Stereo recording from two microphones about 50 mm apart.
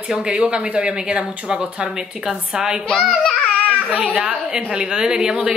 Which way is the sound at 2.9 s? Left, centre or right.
Centre.